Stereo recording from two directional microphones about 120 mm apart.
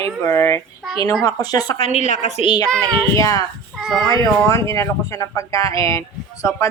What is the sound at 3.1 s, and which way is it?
Speech, 25° left (ahead or behind).